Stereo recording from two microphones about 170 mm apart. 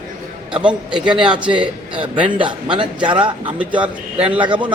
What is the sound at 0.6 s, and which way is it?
A man's voice, 5° right (ahead or behind).